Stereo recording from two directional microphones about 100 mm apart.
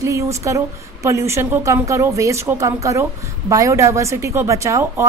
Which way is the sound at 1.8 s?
30° right (ahead or behind).